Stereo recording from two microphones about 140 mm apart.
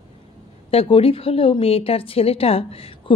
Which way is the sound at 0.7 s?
45° left (ahead or behind).